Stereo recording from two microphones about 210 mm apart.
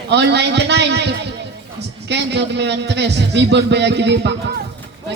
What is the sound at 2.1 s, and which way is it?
A man's voice, 55° right (ahead or behind).